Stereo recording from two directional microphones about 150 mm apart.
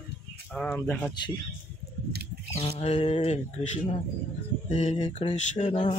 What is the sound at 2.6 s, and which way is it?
Speech, 45° left (ahead or behind).